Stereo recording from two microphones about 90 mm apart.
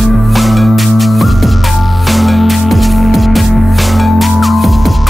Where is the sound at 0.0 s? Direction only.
Centre (ahead or behind).